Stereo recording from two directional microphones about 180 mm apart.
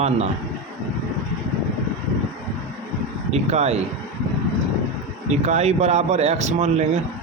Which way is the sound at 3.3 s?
35° right (ahead or behind).